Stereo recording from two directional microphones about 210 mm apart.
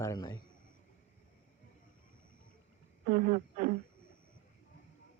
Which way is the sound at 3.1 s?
35° right (ahead or behind).